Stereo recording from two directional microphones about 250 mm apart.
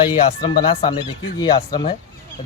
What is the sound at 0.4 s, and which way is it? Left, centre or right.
Speech, centre.